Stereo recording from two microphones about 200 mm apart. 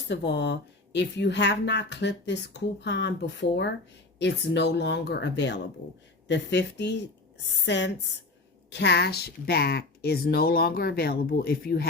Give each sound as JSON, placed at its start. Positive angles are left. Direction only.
{"t": 0.1, "sound": "speech", "side_deg": 60}